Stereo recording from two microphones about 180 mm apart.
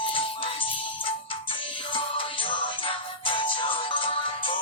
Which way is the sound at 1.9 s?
25° left (ahead or behind).